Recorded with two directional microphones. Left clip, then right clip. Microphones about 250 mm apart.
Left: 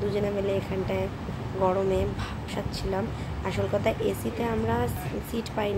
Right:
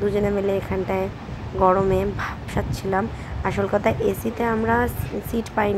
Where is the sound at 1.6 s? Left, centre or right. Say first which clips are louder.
Right 7 dB; centre.